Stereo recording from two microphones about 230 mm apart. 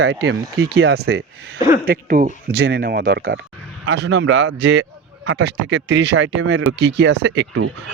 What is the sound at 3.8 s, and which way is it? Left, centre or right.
Speech, right.